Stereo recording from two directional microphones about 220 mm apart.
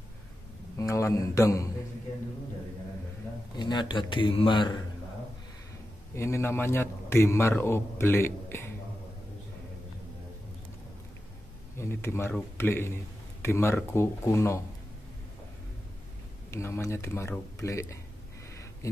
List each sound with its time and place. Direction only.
0.7 s speech: 15° left (ahead or behind)
3.5 s speech: 20° left (ahead or behind)
6.1 s speech: 10° left (ahead or behind)
11.7 s speech: 10° left (ahead or behind)
16.4 s speech: 10° left (ahead or behind)